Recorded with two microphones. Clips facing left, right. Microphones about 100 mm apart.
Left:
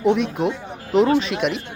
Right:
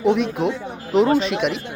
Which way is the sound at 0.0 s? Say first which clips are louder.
Even; centre (ahead or behind).